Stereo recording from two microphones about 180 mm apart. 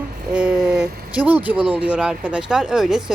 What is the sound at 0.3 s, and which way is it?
Speech, 5° right (ahead or behind).